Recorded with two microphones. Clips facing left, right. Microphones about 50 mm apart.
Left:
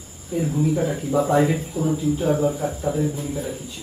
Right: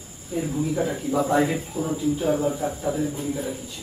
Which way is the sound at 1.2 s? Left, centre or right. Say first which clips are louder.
Left 2 dB; centre.